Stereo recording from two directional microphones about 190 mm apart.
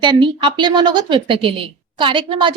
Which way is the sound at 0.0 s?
25° right (ahead or behind).